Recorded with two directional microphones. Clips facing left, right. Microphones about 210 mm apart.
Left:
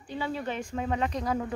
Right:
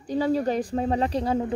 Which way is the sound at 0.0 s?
40° right (ahead or behind).